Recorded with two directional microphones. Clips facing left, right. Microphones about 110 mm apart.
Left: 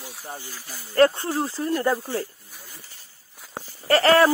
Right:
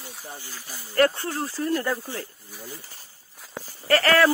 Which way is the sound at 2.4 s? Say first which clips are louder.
Right 6 dB; centre (ahead or behind).